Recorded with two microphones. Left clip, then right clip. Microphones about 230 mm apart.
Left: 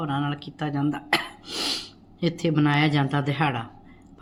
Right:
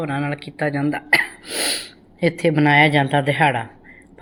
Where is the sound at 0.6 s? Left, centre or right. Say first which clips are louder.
Right 8 dB; left.